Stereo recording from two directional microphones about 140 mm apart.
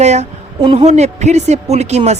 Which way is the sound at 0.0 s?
55° right (ahead or behind).